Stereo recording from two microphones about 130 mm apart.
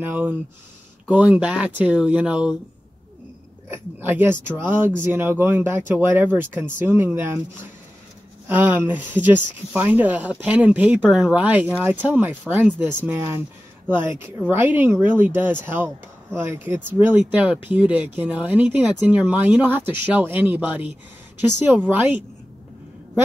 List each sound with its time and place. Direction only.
0.0 s speech: 15° right (ahead or behind)
3.7 s speech: 15° right (ahead or behind)
8.5 s speech: 15° right (ahead or behind)